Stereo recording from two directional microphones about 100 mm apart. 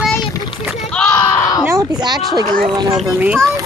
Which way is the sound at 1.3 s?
30° left (ahead or behind).